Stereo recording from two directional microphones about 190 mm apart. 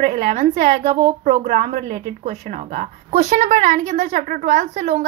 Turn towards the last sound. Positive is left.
turn(degrees=-40)  # may be behind; listen again after turning